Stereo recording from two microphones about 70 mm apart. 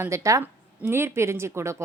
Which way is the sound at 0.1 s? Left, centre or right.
Right.